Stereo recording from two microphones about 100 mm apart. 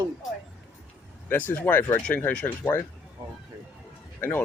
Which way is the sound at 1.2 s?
20° left (ahead or behind).